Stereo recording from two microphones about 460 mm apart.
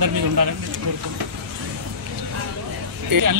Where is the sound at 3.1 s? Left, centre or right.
Right.